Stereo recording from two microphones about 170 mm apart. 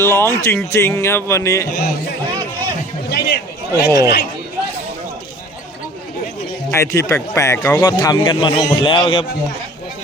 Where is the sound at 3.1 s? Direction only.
70° left (ahead or behind).